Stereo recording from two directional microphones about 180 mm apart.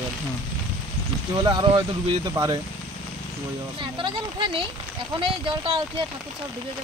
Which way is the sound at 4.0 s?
25° right (ahead or behind).